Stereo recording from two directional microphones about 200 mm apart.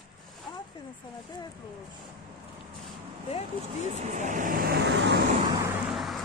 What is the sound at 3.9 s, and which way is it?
Vehicle, 35° right (ahead or behind).